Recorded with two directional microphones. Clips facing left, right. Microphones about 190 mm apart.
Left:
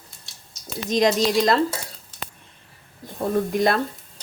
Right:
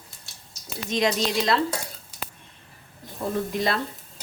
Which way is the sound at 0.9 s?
40° left (ahead or behind).